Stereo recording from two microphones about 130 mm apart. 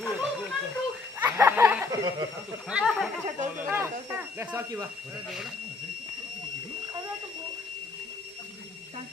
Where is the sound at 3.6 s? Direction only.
15° right (ahead or behind).